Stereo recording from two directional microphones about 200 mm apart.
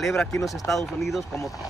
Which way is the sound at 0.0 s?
Centre (ahead or behind).